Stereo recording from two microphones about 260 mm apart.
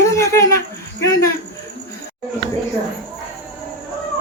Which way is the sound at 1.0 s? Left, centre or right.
Centre.